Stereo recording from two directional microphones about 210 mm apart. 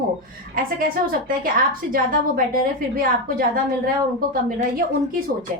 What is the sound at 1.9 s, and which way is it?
A woman's voice, 45° right (ahead or behind).